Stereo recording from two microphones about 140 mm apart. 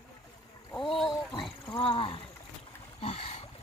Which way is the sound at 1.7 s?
40° left (ahead or behind).